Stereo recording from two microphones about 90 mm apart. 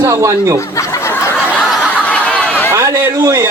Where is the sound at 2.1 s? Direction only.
10° left (ahead or behind).